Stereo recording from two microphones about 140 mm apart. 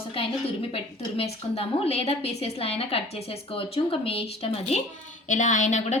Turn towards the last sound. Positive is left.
turn(degrees=55)  # may be behind; listen again after turning